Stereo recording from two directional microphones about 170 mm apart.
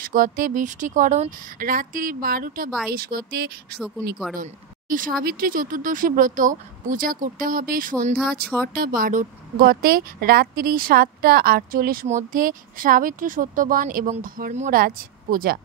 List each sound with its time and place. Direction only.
0.0 s a woman's voice: 55° right (ahead or behind)
4.4 s a woman's voice: 55° right (ahead or behind)
14.7 s a woman's voice: 60° right (ahead or behind)